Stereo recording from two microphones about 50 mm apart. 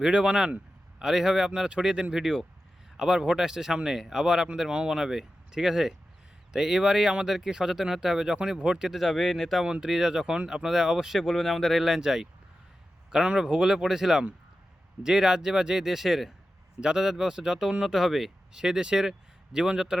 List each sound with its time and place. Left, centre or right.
0.0 s speech: centre
9.0 s speech: centre
9.6 s speech: centre
11.2 s speech: centre